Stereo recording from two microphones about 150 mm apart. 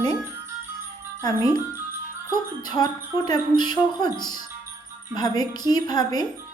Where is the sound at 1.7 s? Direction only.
15° right (ahead or behind).